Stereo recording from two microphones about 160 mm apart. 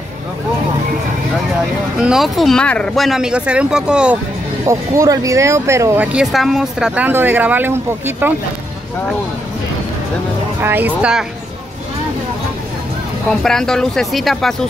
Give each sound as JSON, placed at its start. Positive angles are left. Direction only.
{"t": 2.0, "sound": "speech", "side_deg": -5}
{"t": 4.6, "sound": "speech", "side_deg": -20}
{"t": 6.1, "sound": "speech", "side_deg": 0}
{"t": 10.6, "sound": "speech", "side_deg": -10}
{"t": 13.4, "sound": "speech", "side_deg": 5}